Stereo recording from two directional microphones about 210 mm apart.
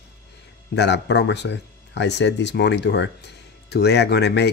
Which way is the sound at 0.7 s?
55° left (ahead or behind).